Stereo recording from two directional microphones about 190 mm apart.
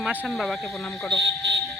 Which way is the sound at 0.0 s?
5° right (ahead or behind).